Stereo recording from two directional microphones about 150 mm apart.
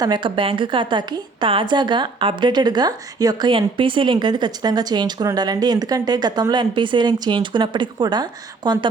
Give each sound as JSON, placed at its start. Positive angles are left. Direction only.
{"t": 0.0, "sound": "a woman's voice", "side_deg": -30}